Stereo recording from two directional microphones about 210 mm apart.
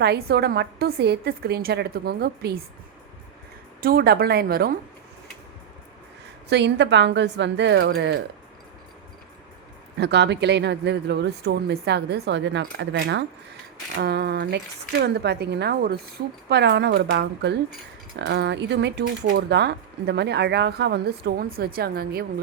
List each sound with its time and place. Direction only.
0.0 s speech: 50° right (ahead or behind)
3.8 s speech: 45° right (ahead or behind)
6.5 s speech: 55° right (ahead or behind)
10.0 s speech: 55° right (ahead or behind)